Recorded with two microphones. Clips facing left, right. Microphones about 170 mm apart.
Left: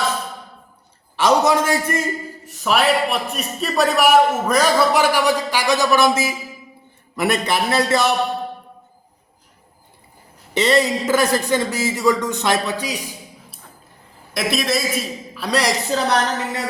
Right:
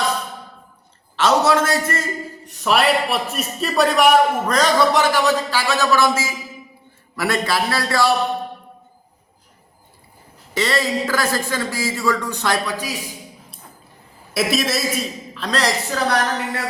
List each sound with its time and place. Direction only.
1.1 s a man's voice: 15° left (ahead or behind)
2.4 s a man's voice: centre (ahead or behind); by 8.1 s 20° left (ahead or behind)
10.6 s speech: 20° left (ahead or behind)
14.3 s a woman's voice: centre (ahead or behind)
15.4 s a man's voice: 10° left (ahead or behind)